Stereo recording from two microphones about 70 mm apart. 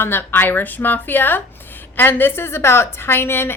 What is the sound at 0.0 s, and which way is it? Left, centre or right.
A woman's voice, left.